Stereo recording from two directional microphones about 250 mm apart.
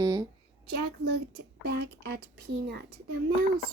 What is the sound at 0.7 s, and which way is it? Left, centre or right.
A child's voice, right.